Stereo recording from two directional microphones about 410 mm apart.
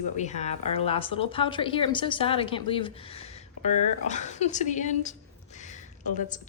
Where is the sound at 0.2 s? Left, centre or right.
Centre.